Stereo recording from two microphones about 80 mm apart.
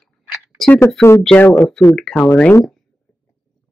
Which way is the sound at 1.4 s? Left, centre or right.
Left.